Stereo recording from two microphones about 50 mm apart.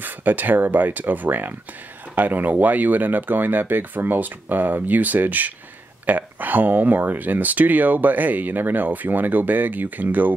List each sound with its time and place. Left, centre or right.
0.0 s speech: right